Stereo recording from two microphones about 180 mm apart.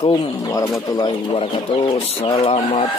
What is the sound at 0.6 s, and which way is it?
Speech, 20° left (ahead or behind).